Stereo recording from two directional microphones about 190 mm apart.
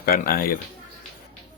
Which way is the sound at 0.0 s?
50° left (ahead or behind).